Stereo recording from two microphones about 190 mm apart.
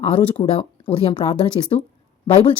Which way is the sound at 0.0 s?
30° left (ahead or behind).